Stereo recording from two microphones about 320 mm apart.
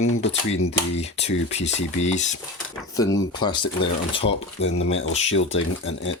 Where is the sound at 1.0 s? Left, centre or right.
Centre.